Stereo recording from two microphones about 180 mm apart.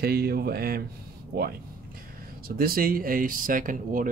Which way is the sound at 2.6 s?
55° right (ahead or behind).